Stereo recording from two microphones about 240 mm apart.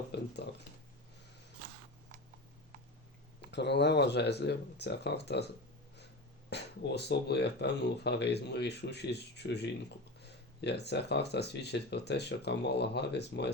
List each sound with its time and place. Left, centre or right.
0.1 s a sound: left
3.4 s speech: left
6.5 s speech: left